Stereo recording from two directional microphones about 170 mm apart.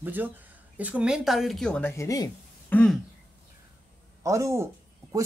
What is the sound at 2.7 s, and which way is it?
Speech, 5° left (ahead or behind).